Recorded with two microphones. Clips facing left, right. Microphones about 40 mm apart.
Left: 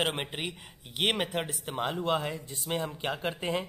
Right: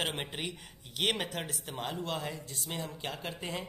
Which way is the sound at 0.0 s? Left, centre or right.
Centre.